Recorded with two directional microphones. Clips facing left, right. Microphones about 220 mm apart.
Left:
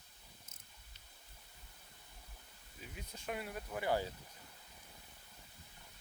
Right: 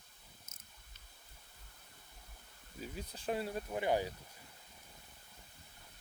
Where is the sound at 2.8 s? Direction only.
35° right (ahead or behind); by 4.1 s 20° right (ahead or behind).